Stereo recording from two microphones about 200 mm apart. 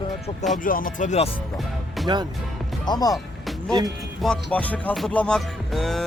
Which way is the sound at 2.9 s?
20° left (ahead or behind).